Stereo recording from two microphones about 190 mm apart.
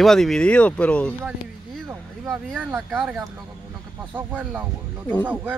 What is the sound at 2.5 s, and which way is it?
Speech, 5° right (ahead or behind).